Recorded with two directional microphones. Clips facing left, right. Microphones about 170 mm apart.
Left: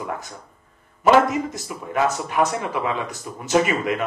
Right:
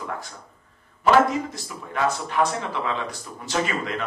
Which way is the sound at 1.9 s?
20° left (ahead or behind).